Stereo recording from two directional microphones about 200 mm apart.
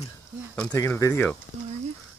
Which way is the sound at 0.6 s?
10° left (ahead or behind).